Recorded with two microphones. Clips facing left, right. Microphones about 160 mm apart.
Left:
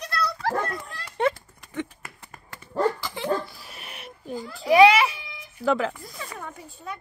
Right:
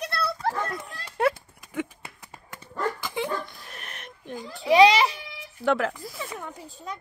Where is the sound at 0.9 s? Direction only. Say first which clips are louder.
Right 2 dB; 5° right (ahead or behind).